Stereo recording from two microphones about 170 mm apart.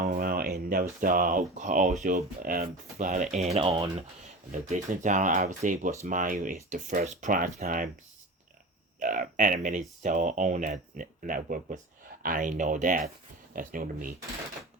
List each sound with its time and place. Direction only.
0.0 s speech: 60° right (ahead or behind); by 3.8 s 35° right (ahead or behind)
4.6 s speech: 45° right (ahead or behind)
9.0 s speech: 50° right (ahead or behind)